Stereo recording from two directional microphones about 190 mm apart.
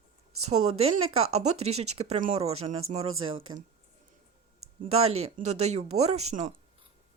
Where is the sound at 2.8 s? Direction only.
90° right.